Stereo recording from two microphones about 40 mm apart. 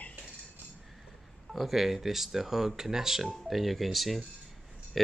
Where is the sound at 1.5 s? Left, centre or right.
Centre.